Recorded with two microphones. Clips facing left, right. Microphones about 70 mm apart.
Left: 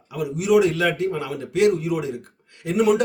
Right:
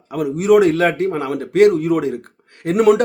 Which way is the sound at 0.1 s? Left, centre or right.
Right.